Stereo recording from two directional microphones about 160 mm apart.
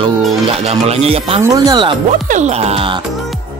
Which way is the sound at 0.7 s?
40° right (ahead or behind).